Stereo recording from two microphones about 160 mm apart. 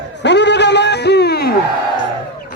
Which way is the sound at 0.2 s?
90° left.